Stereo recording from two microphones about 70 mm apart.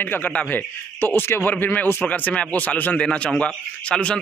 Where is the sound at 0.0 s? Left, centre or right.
Left.